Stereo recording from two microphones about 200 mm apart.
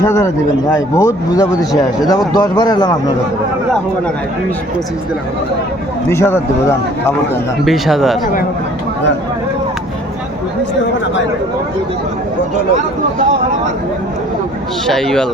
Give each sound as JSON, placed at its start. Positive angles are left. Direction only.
{"t": 0.0, "sound": "speech", "side_deg": 15}
{"t": 6.1, "sound": "speech", "side_deg": 10}
{"t": 7.6, "sound": "speech", "side_deg": 0}
{"t": 14.8, "sound": "speech", "side_deg": 0}